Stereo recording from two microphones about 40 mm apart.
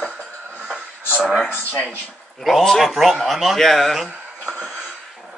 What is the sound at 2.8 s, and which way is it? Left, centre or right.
A man's voice, centre.